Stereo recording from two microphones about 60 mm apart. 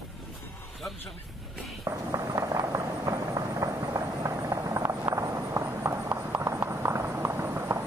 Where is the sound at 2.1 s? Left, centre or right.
Right.